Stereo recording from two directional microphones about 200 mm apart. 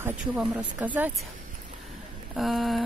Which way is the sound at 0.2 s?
5° right (ahead or behind).